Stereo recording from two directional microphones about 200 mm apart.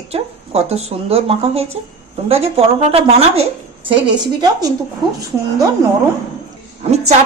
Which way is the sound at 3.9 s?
20° right (ahead or behind).